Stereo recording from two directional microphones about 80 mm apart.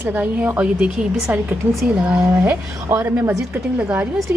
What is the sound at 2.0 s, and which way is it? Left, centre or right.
Speech, right.